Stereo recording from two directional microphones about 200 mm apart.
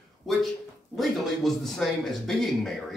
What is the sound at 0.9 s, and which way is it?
A man's voice, centre (ahead or behind).